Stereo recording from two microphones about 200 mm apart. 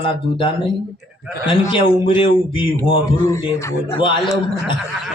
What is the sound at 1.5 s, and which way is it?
Speech, 25° left (ahead or behind).